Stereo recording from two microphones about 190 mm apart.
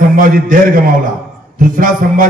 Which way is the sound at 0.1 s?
45° right (ahead or behind).